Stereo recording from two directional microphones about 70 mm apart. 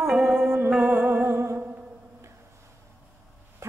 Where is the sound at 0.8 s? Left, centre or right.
Right.